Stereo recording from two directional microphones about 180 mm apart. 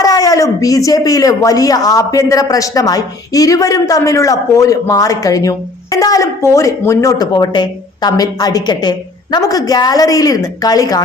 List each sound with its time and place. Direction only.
0.0 s speech: 20° left (ahead or behind)